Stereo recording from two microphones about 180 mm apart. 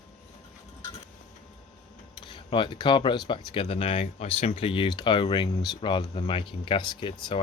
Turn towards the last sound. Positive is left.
turn(degrees=25)  # may be behind; listen again after turning